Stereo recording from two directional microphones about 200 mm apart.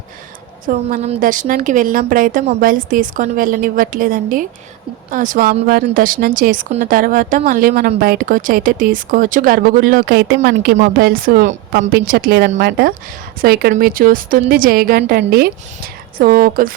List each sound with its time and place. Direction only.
0.6 s speech: 40° right (ahead or behind)